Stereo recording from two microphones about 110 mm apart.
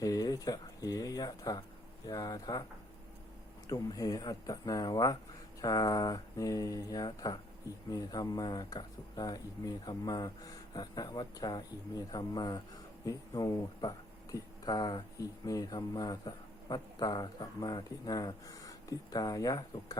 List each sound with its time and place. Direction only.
0.0 s a man's voice: 35° left (ahead or behind)
3.7 s a man's voice: 35° left (ahead or behind)